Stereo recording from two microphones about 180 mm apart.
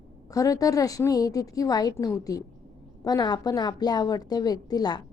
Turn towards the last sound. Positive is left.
turn(degrees=20)  # may be behind; listen again after turning